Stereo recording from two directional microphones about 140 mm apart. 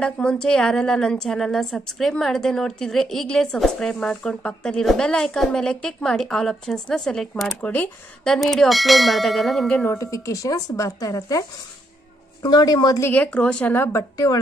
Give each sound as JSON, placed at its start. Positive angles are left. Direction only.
{"t": 0.0, "sound": "a woman's voice", "side_deg": 5}
{"t": 9.8, "sound": "speech", "side_deg": 20}
{"t": 13.1, "sound": "speech", "side_deg": 10}
{"t": 13.9, "sound": "speech", "side_deg": 25}